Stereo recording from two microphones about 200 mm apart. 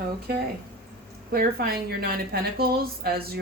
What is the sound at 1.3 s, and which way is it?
A woman's voice, 50° right (ahead or behind).